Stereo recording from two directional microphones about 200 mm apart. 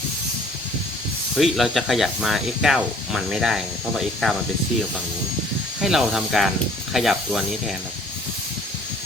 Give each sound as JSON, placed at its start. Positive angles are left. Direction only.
{"t": 1.4, "sound": "speech", "side_deg": 0}
{"t": 5.8, "sound": "speech", "side_deg": 0}